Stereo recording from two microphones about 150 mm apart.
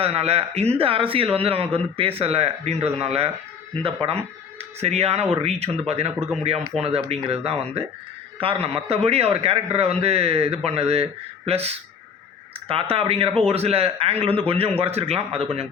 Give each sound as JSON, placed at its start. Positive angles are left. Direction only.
{"t": 0.0, "sound": "a man's voice", "side_deg": -40}